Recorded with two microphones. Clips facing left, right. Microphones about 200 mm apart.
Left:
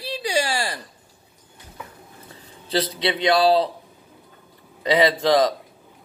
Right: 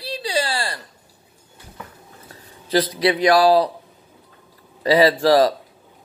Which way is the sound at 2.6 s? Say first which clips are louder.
Right 5 dB; 25° left (ahead or behind).